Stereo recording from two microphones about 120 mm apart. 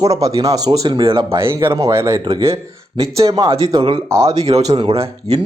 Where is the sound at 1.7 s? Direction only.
25° right (ahead or behind).